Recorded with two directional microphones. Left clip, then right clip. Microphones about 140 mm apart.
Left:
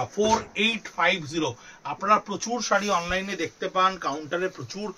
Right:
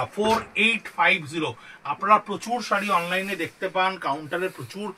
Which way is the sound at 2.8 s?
20° left (ahead or behind).